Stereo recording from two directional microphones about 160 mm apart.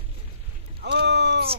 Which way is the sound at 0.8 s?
90° right.